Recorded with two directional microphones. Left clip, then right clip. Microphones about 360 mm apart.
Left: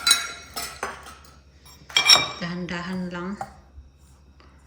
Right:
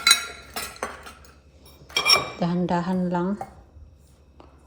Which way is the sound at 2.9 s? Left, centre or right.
Right.